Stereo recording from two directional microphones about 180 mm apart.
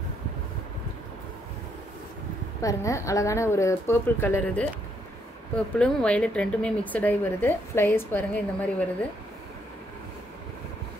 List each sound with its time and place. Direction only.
2.6 s a woman's voice: 15° left (ahead or behind)
5.8 s a woman's voice: 5° left (ahead or behind)